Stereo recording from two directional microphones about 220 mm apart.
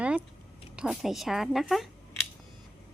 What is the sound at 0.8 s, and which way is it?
A woman's voice, centre (ahead or behind).